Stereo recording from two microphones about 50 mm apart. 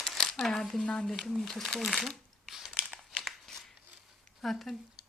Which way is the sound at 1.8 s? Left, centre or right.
Centre.